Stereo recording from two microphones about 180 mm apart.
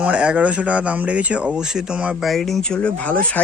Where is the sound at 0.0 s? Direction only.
5° right (ahead or behind).